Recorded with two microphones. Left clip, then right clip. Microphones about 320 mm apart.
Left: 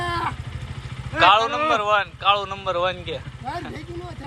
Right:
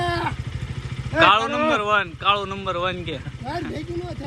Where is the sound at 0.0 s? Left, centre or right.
Centre.